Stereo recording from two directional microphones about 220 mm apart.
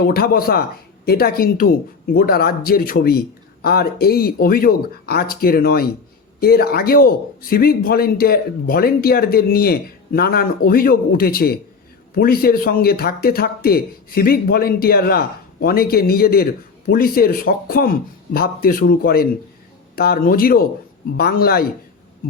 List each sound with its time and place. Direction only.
0.0 s speech: 45° left (ahead or behind)